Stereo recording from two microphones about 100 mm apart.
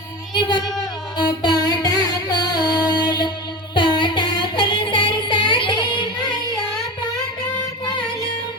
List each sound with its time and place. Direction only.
0.3 s music: 50° left (ahead or behind)